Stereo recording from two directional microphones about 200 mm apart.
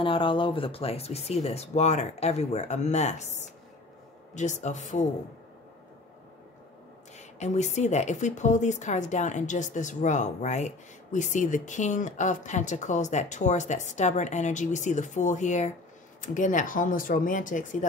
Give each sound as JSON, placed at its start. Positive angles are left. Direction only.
{"t": 0.0, "sound": "a woman's voice", "side_deg": 25}
{"t": 7.2, "sound": "a woman's voice", "side_deg": 35}